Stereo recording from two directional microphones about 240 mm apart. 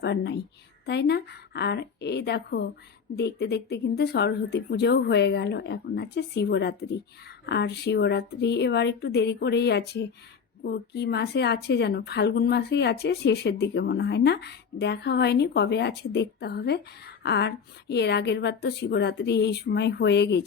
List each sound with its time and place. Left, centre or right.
0.0 s a woman's voice: left